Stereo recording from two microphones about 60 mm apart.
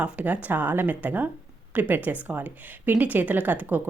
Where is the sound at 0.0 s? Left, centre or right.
Right.